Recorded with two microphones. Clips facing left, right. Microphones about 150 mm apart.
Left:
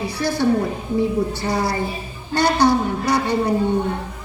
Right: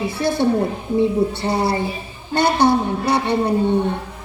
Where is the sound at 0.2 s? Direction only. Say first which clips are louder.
Right 1 dB; 25° right (ahead or behind).